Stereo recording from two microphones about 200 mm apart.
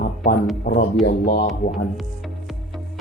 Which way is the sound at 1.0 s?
50° left (ahead or behind).